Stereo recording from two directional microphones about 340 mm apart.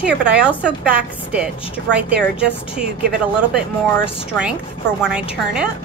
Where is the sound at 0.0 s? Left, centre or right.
Centre.